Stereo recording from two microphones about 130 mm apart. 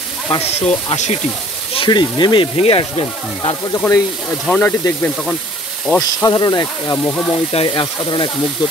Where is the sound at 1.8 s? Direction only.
35° left (ahead or behind).